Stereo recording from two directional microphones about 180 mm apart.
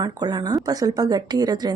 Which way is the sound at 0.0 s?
20° right (ahead or behind).